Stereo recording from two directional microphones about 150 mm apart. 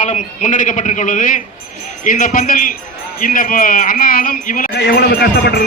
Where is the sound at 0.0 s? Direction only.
55° left (ahead or behind).